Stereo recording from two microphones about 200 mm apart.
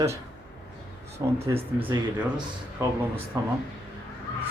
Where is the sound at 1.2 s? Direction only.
15° right (ahead or behind).